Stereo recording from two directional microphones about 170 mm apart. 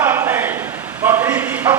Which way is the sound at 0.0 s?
15° right (ahead or behind).